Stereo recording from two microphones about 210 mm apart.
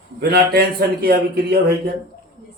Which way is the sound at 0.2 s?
50° right (ahead or behind).